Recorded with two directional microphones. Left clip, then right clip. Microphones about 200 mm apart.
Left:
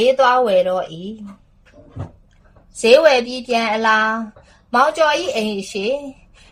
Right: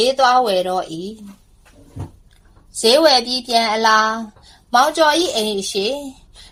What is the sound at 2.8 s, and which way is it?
A woman's voice, 20° right (ahead or behind).